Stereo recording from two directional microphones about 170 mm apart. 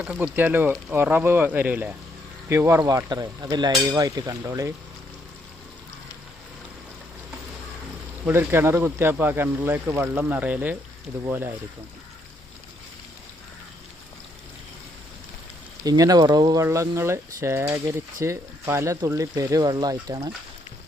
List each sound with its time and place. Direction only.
0.0 s speech: 10° right (ahead or behind)
8.3 s speech: 15° right (ahead or behind)
15.8 s speech: 20° right (ahead or behind)